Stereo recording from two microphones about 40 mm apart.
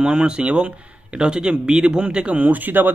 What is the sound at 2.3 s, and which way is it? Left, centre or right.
Speech, right.